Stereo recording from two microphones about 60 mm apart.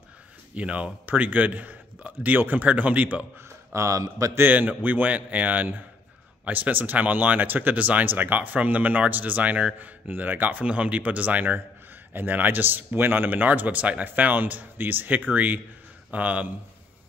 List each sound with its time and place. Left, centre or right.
0.6 s speech: right
3.4 s speech: right
4.4 s a man's voice: right